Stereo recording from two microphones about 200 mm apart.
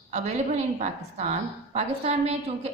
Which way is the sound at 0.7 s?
35° right (ahead or behind).